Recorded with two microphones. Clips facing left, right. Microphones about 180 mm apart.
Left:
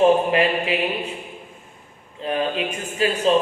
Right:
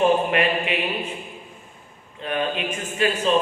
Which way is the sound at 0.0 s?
30° left (ahead or behind).